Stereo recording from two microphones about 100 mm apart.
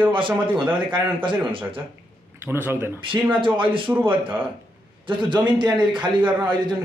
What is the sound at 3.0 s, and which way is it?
Speech, 55° right (ahead or behind).